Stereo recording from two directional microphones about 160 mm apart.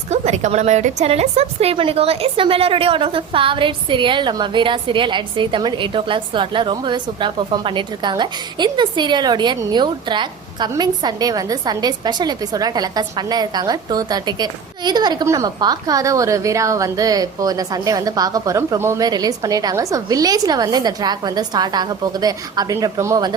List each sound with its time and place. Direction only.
0.1 s a woman's voice: 45° right (ahead or behind); by 23.3 s 20° right (ahead or behind)